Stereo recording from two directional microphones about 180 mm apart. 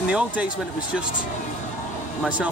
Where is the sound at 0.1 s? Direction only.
5° right (ahead or behind).